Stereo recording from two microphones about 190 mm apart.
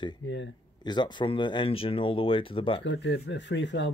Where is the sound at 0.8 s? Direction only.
25° left (ahead or behind).